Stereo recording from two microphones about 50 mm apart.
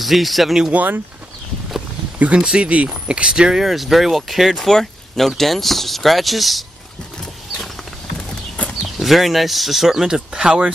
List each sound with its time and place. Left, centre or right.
0.0 s speech: centre
0.7 s speech: right
2.1 s speech: right
3.5 s speech: centre
8.9 s speech: centre